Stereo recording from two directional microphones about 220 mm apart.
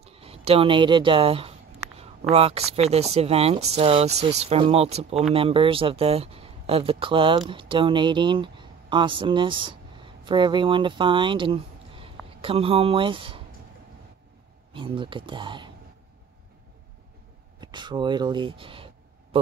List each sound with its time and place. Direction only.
0.0 s speech: 25° right (ahead or behind)
14.7 s speech: 25° right (ahead or behind)
17.6 s speech: 20° right (ahead or behind)